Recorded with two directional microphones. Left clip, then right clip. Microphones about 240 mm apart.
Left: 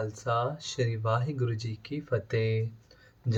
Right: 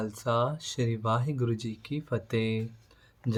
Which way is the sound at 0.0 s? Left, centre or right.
Right.